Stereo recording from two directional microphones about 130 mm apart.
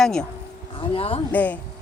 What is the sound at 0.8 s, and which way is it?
Speech, 45° left (ahead or behind).